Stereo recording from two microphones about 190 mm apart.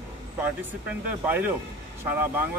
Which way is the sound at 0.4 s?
10° right (ahead or behind).